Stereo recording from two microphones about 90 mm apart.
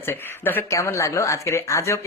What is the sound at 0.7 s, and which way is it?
Speech, 35° left (ahead or behind).